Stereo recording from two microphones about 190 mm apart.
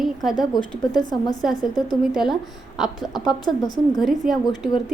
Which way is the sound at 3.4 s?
20° left (ahead or behind).